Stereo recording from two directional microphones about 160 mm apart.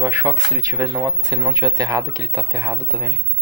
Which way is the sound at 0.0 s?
20° right (ahead or behind).